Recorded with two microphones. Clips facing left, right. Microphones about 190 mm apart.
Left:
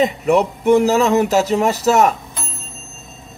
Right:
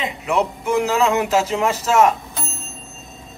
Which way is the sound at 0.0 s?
40° left (ahead or behind).